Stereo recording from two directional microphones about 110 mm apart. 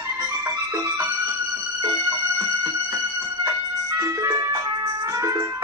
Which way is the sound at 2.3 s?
30° right (ahead or behind).